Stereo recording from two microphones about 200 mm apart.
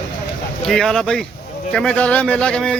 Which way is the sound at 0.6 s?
Centre (ahead or behind).